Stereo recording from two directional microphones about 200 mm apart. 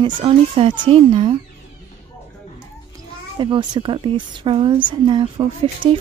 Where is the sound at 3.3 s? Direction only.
25° right (ahead or behind).